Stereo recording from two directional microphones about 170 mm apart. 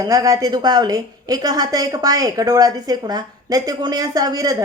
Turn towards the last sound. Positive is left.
turn(degrees=-20)  # may be behind; listen again after turning